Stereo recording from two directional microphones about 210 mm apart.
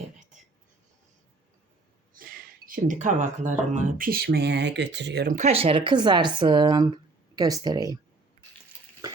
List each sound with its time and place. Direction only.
2.1 s speech: 40° right (ahead or behind)
5.3 s speech: 30° right (ahead or behind)